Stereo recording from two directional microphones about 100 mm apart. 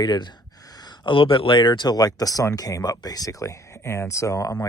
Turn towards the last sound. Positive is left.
turn(degrees=40)  # may be behind; listen again after turning